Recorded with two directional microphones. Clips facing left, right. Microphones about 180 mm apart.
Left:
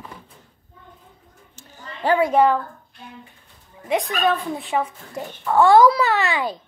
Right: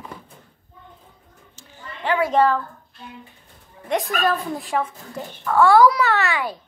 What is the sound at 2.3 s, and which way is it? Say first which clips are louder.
Speech: right 1 dB; 15° left (ahead or behind).